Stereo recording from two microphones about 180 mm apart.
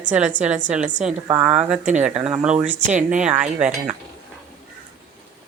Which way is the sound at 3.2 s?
5° right (ahead or behind).